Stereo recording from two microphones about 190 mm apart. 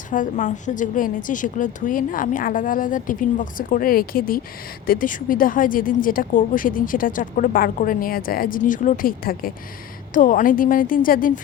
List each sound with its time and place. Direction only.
0.1 s speech: 40° left (ahead or behind)